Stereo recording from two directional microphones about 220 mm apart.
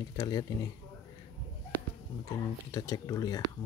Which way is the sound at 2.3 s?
15° left (ahead or behind).